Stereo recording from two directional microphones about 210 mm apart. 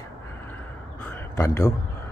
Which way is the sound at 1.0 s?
15° left (ahead or behind).